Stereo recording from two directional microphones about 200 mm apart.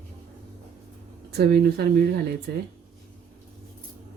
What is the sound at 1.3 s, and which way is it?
Speech, 55° right (ahead or behind).